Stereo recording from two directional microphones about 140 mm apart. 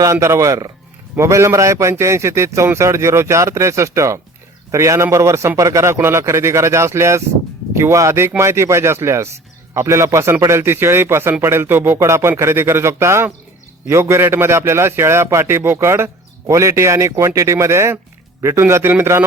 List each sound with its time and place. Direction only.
0.0 s a man's voice: 20° right (ahead or behind)